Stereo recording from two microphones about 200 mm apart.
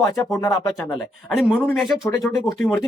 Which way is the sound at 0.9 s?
Centre (ahead or behind).